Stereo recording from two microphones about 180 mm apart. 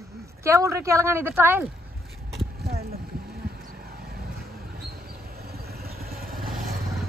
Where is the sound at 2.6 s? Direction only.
60° right (ahead or behind).